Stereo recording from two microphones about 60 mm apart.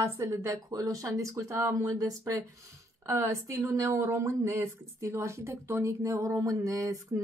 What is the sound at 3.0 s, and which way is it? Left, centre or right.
A woman's voice, right.